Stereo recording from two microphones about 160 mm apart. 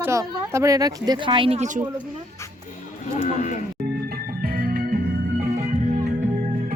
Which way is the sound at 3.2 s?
50° left (ahead or behind).